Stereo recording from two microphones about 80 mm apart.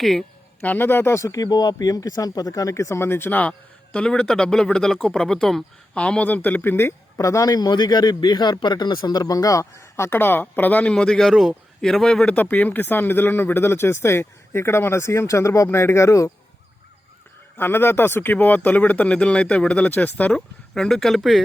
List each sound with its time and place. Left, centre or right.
0.0 s speech: centre
0.6 s a man's voice: left
7.2 s a man's voice: left
10.9 s speech: centre
12.2 s speech: centre; by 16.3 s left
17.6 s speech: left
20.3 s speech: centre